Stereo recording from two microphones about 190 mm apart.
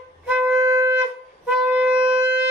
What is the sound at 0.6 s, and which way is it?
Wind instrument, 20° right (ahead or behind).